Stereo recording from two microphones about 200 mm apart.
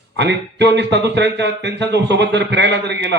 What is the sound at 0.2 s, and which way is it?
A man's voice, 60° right (ahead or behind).